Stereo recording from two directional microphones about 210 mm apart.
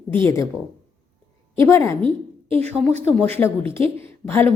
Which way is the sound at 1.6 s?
10° left (ahead or behind).